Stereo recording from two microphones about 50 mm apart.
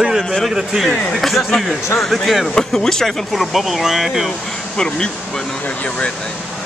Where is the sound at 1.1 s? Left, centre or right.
Centre.